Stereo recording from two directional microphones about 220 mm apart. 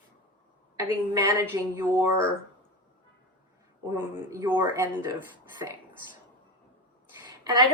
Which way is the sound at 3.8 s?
10° right (ahead or behind).